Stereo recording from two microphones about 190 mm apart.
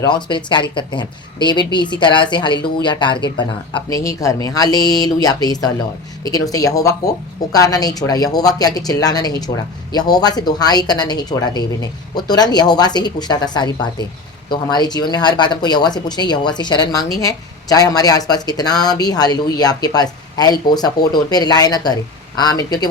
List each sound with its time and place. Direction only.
0.0 s speech: 25° left (ahead or behind)